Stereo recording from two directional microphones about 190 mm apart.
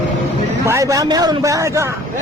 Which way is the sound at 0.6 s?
15° right (ahead or behind).